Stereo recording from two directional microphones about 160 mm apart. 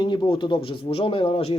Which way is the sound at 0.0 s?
30° left (ahead or behind).